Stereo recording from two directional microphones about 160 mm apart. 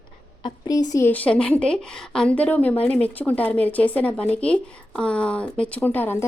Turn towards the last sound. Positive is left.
turn(degrees=10)  # may be behind; listen again after turning